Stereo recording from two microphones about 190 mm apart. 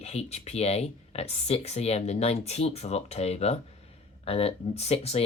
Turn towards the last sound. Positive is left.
turn(degrees=35)  # may be behind; listen again after turning